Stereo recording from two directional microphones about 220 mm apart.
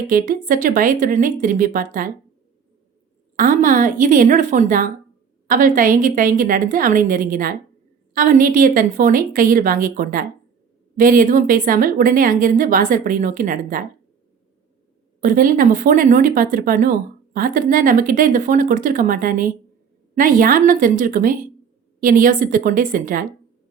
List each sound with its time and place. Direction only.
0.1 s a woman's voice: 40° right (ahead or behind)
3.3 s a woman's voice: 40° right (ahead or behind)
15.2 s a woman's voice: 40° right (ahead or behind)